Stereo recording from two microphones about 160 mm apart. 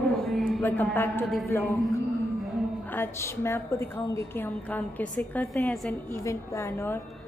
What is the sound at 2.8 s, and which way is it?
A woman's voice, 15° left (ahead or behind).